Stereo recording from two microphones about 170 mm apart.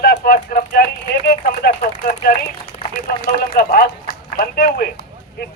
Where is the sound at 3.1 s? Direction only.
65° left (ahead or behind).